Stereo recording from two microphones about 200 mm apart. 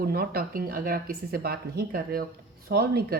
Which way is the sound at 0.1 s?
50° right (ahead or behind).